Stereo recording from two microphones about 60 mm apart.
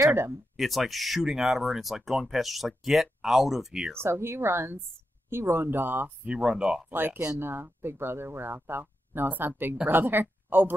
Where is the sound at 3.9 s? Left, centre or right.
Right.